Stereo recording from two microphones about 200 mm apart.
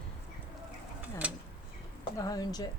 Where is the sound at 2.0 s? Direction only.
20° left (ahead or behind).